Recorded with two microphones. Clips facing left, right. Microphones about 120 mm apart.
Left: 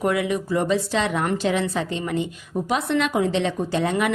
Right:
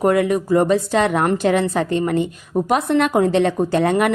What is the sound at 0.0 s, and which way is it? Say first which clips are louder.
A woman's voice: right 6 dB; 45° right (ahead or behind).